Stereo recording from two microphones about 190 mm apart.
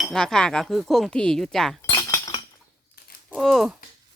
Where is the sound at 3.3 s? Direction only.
Centre (ahead or behind).